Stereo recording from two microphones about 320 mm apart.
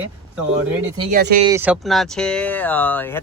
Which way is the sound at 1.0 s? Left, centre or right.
Right.